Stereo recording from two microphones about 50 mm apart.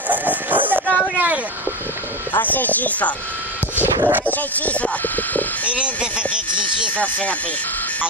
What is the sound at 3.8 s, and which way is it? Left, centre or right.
Speech, right.